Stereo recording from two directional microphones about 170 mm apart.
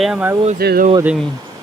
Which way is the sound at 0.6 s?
70° right (ahead or behind).